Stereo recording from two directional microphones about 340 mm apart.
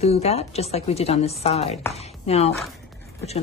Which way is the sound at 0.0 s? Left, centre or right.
Centre.